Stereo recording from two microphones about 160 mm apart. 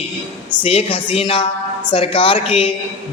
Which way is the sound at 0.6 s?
35° left (ahead or behind).